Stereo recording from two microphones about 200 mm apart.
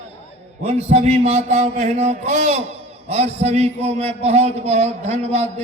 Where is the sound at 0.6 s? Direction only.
35° right (ahead or behind).